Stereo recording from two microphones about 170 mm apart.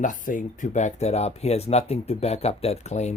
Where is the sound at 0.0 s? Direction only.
50° left (ahead or behind).